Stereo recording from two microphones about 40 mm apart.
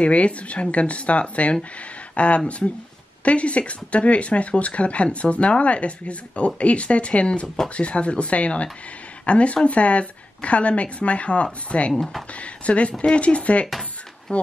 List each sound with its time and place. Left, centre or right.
0.0 s speech: left
7.4 s speech: centre
7.7 s speech: left